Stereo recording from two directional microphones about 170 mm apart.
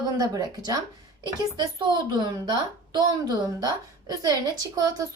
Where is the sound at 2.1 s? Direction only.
25° right (ahead or behind).